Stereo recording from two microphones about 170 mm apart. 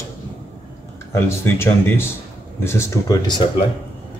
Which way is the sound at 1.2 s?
15° left (ahead or behind).